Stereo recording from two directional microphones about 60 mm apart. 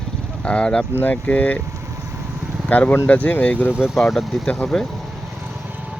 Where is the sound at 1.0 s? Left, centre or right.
Left.